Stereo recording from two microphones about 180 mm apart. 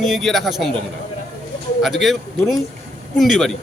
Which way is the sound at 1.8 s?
Centre (ahead or behind).